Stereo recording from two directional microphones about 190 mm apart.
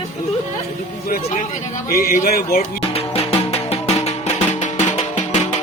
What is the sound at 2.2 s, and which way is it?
Speech, 50° left (ahead or behind).